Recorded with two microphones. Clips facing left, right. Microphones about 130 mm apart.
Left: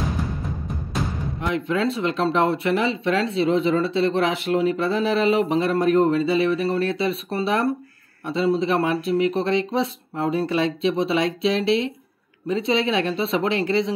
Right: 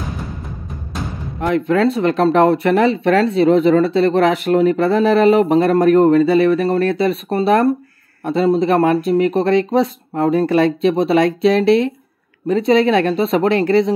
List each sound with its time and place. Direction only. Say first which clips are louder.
0.1 s music: left 1 dB; centre (ahead or behind)
1.4 s speech: right 8 dB; 55° right (ahead or behind)